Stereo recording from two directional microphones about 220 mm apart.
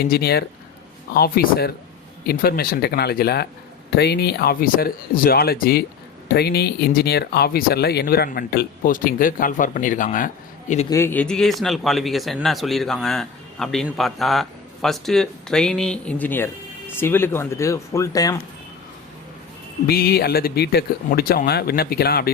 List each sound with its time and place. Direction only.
0.1 s speech: 45° left (ahead or behind)
10.8 s a man's voice: 10° left (ahead or behind)
19.9 s speech: 45° left (ahead or behind)